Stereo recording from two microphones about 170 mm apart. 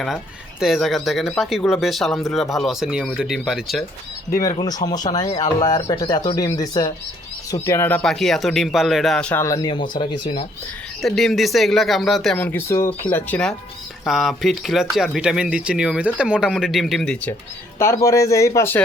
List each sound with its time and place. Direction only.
0.6 s speech: centre (ahead or behind)
4.8 s speech: 35° left (ahead or behind)
5.5 s speech: 25° left (ahead or behind); by 9.4 s 5° left (ahead or behind)
9.4 s speech: 20° left (ahead or behind)
11.0 s speech: centre (ahead or behind)